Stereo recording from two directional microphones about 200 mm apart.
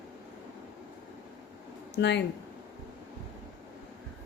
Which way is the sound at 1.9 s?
60° left (ahead or behind).